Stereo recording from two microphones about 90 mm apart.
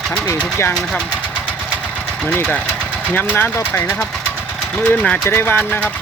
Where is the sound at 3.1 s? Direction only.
20° left (ahead or behind).